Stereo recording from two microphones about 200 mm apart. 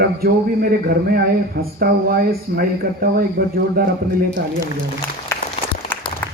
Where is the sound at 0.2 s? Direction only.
50° right (ahead or behind).